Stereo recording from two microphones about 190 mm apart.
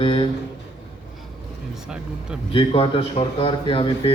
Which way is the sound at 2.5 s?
25° left (ahead or behind).